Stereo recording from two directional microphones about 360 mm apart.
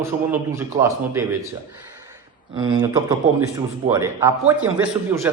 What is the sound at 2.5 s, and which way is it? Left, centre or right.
A man's voice, centre.